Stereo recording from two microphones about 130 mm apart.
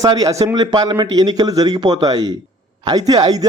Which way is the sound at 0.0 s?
30° right (ahead or behind).